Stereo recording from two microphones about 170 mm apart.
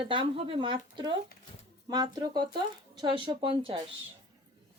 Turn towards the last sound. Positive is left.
turn(degrees=-30)  # may be behind; listen again after turning